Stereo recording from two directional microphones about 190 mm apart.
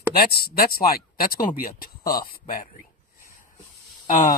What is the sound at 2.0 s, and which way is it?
Speech, 20° left (ahead or behind).